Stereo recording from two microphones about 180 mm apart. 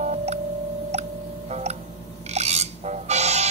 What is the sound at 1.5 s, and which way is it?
Tick-tock, 40° right (ahead or behind).